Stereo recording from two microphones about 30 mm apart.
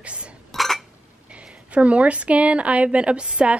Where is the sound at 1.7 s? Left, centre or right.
Right.